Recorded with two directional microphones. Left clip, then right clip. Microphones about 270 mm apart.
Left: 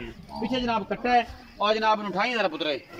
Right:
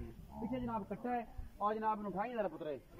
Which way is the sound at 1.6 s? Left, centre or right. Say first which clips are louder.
Left 14 dB; left.